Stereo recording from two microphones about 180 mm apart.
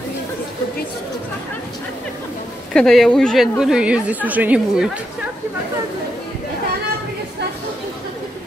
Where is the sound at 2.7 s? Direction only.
Centre (ahead or behind).